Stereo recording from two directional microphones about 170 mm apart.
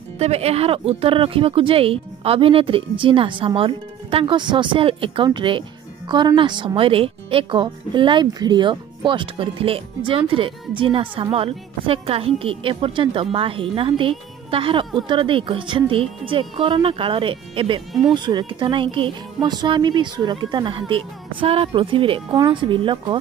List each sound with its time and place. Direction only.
0.2 s speech: 40° right (ahead or behind)